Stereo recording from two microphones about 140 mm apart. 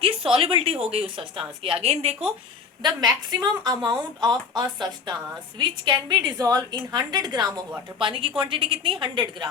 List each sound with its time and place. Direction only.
0.0 s a woman's voice: 40° right (ahead or behind)
2.8 s a woman's voice: 30° right (ahead or behind)
7.9 s a woman's voice: 40° right (ahead or behind)